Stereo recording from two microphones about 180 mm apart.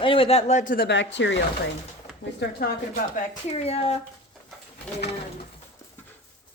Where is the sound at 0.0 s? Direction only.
30° left (ahead or behind); by 0.9 s 45° left (ahead or behind).